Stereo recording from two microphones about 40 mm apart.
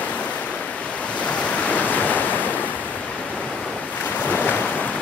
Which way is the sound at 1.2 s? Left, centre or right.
Left.